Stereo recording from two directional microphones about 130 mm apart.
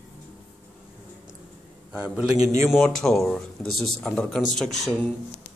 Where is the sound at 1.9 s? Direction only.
10° right (ahead or behind).